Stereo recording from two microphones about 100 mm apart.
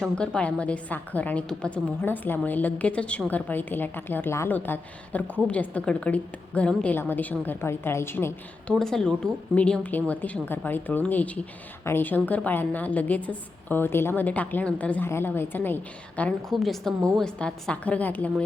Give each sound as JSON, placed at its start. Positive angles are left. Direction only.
{"t": 0.2, "sound": "a woman's voice", "side_deg": 10}
{"t": 8.7, "sound": "a woman's voice", "side_deg": 5}
{"t": 16.5, "sound": "a woman's voice", "side_deg": 5}